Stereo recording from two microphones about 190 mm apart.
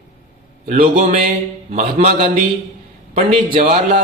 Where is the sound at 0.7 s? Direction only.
40° right (ahead or behind).